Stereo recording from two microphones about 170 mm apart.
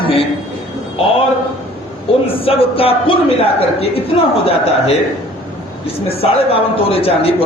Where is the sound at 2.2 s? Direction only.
35° left (ahead or behind).